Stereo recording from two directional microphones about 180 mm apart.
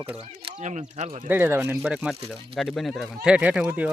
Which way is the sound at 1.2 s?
10° right (ahead or behind).